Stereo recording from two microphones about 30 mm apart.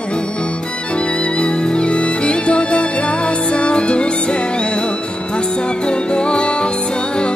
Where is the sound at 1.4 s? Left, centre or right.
Left.